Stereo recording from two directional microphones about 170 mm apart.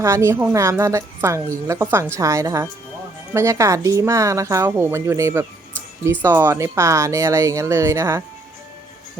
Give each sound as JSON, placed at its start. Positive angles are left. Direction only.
{"t": 0.0, "sound": "a woman's voice", "side_deg": -15}